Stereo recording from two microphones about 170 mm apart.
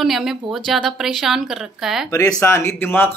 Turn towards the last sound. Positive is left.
turn(degrees=10)  # may be behind; listen again after turning